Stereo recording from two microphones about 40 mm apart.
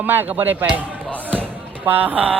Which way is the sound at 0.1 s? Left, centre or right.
Right.